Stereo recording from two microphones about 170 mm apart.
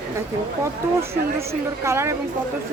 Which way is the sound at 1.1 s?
15° right (ahead or behind).